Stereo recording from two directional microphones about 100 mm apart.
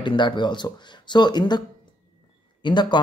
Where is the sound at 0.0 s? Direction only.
50° left (ahead or behind).